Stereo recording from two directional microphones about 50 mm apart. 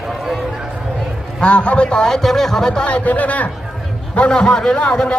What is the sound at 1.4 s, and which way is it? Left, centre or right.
A man's voice, left.